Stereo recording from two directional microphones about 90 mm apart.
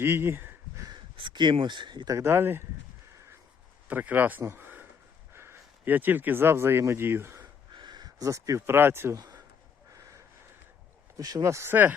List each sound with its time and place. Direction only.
0.0 s speech: 25° right (ahead or behind)
1.1 s speech: 60° right (ahead or behind)
2.0 s speech: 30° right (ahead or behind)
3.8 s speech: 20° right (ahead or behind)
4.4 s a sound: 25° right (ahead or behind)
5.3 s speech: 30° right (ahead or behind)
7.7 s speech: 55° right (ahead or behind); by 9.2 s 30° right (ahead or behind)
9.9 s a sound: 35° right (ahead or behind)
11.2 s speech: 40° right (ahead or behind); by 11.9 s 20° right (ahead or behind)